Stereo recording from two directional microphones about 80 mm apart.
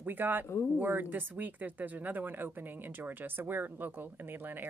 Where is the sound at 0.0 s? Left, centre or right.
Right.